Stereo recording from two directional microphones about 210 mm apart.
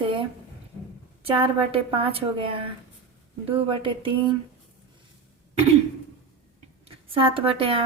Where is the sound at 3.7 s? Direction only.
25° right (ahead or behind).